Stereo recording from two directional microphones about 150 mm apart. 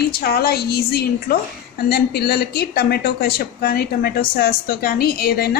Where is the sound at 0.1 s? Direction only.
90° left.